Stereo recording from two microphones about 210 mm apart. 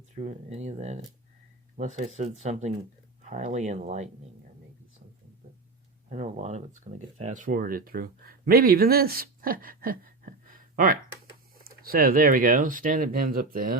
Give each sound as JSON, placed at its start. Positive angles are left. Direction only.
{"t": 0.2, "sound": "speech", "side_deg": -35}
{"t": 6.1, "sound": "speech", "side_deg": -35}